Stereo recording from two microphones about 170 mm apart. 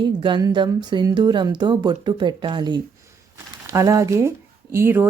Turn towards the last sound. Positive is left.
turn(degrees=-15)  # may be behind; listen again after turning